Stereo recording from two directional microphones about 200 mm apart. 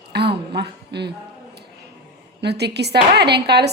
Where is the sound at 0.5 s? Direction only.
55° right (ahead or behind).